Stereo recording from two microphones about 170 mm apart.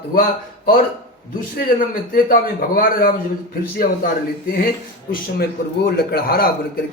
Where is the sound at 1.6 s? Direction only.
60° left (ahead or behind).